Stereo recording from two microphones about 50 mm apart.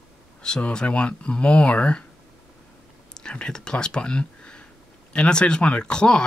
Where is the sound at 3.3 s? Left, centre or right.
Centre.